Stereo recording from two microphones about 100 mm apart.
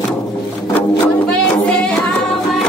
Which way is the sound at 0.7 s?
20° left (ahead or behind).